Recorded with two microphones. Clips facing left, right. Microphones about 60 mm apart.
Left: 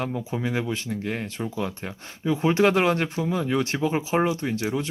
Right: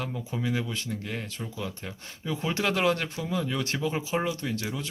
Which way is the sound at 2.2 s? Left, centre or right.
Left.